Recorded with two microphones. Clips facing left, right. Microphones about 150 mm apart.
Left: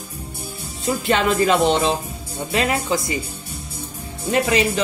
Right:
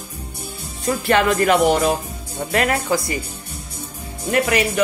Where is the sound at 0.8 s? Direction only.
20° left (ahead or behind).